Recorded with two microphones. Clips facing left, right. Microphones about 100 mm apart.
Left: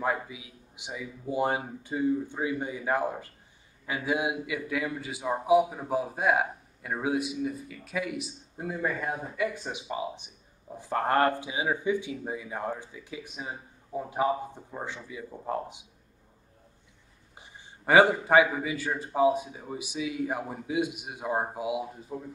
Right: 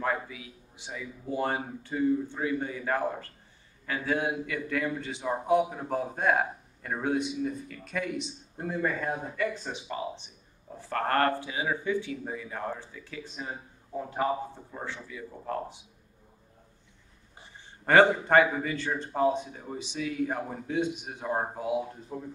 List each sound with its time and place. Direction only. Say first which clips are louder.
0.0 s a man's voice: left 1 dB; 15° left (ahead or behind)
17.4 s a man's voice: left 1 dB; 10° left (ahead or behind)